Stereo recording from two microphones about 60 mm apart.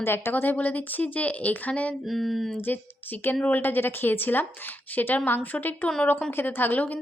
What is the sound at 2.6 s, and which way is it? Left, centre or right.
A woman's voice, left.